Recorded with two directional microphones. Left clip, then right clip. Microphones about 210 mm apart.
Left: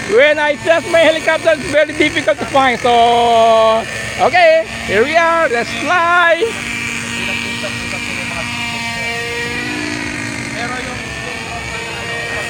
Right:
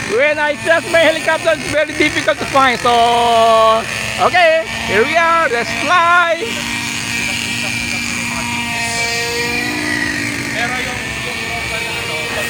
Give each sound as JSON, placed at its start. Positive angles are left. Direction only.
{"t": 0.2, "sound": "speech", "side_deg": 40}